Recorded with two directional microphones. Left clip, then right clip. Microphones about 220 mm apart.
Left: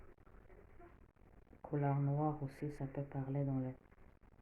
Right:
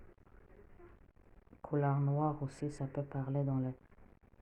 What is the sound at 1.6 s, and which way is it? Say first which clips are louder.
Speech: right 4 dB; 30° right (ahead or behind).